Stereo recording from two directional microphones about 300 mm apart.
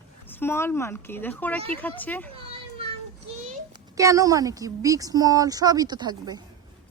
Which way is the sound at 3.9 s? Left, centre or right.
Centre.